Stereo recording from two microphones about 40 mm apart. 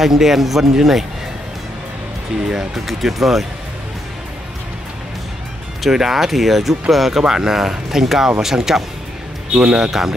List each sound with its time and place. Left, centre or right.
0.0 s speech: centre
2.9 s speech: centre
5.8 s speech: centre
9.5 s speech: right
9.8 s speech: centre